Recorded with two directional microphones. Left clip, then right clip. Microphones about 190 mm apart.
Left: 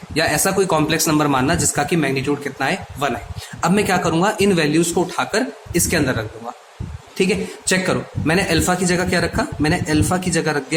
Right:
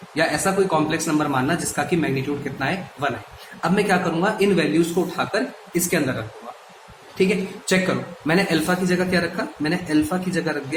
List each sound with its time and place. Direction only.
0.1 s speech: 45° left (ahead or behind)
7.2 s speech: 40° left (ahead or behind)